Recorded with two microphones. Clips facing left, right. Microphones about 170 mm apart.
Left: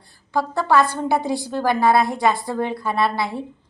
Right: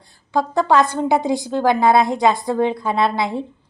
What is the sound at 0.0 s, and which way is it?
A woman's voice, 15° right (ahead or behind).